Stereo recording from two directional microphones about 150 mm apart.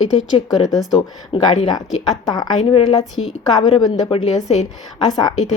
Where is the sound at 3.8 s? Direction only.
25° left (ahead or behind).